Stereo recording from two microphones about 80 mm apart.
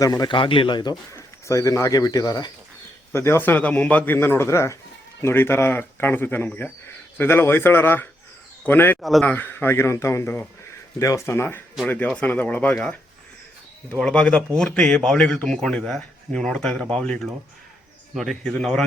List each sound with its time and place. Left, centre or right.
0.0 s a man's voice: left
0.3 s a man's voice: left
1.1 s speech: left
3.1 s speech: left
9.0 s speech: centre
9.2 s speech: left
11.0 s speech: left
11.9 s speech: left
13.9 s a man's voice: centre